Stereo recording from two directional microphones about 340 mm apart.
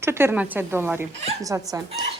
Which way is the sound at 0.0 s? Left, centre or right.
Centre.